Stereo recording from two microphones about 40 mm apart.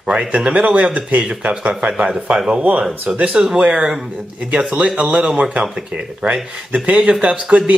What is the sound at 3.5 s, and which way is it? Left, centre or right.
Speech, centre.